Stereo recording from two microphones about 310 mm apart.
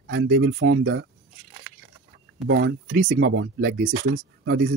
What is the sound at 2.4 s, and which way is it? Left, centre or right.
Speech, right.